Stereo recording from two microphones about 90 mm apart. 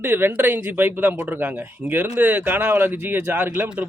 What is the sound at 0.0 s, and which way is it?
Speech, 25° right (ahead or behind).